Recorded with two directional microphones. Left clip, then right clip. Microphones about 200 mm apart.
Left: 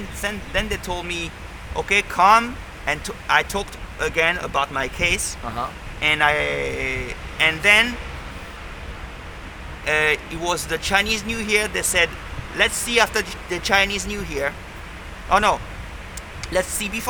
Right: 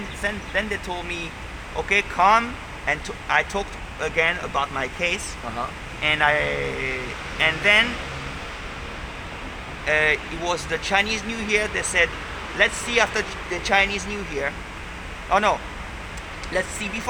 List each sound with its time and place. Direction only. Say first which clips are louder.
0.2 s speech: left 1 dB; 60° left (ahead or behind)
9.8 s speech: left 1 dB; 60° left (ahead or behind)